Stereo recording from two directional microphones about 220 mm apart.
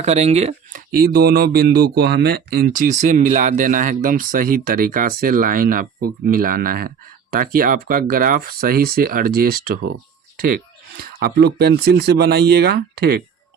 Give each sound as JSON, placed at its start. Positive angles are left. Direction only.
{"t": 0.0, "sound": "speech", "side_deg": -30}
{"t": 0.9, "sound": "speech", "side_deg": -40}